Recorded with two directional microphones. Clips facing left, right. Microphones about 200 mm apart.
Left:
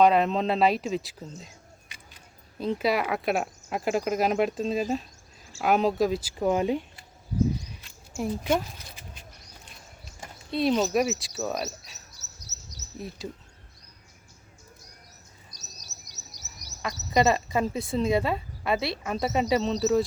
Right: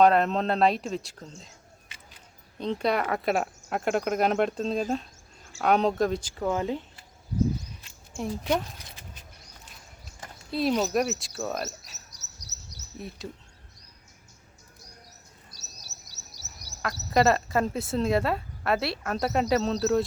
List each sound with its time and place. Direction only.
0.0 s speech: centre (ahead or behind)
2.6 s speech: 5° left (ahead or behind)
6.4 s speech: 15° left (ahead or behind)
8.1 s speech: centre (ahead or behind)
10.5 s speech: centre (ahead or behind)
12.1 s bird: 15° right (ahead or behind)
15.5 s chirp: 15° left (ahead or behind)
16.8 s speech: centre (ahead or behind)